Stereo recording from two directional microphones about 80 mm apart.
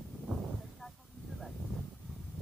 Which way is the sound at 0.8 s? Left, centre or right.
Centre.